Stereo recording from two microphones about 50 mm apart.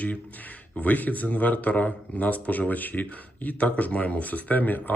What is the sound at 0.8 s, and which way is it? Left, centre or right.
Speech, left.